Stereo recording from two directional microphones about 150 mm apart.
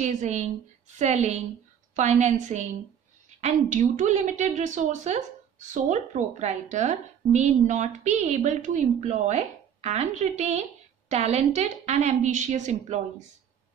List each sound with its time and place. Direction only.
0.0 s speech: 50° right (ahead or behind)